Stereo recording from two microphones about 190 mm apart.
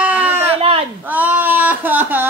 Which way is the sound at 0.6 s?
30° right (ahead or behind).